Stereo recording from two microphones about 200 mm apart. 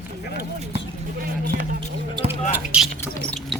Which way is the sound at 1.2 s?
40° right (ahead or behind).